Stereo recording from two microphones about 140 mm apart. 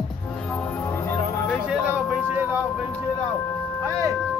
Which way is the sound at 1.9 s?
15° right (ahead or behind).